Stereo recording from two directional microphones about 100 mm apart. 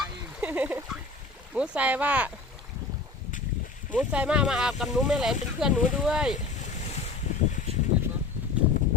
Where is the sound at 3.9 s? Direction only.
15° right (ahead or behind).